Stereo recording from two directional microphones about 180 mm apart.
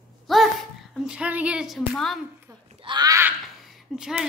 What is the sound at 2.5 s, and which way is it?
Wail, 20° right (ahead or behind).